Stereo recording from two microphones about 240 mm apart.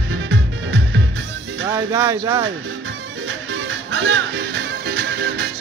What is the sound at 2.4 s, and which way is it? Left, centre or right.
Music, right.